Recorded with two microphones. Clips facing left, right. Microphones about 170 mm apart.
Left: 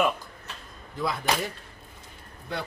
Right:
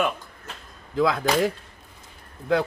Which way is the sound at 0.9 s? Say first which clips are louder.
Right 7 dB; 90° right.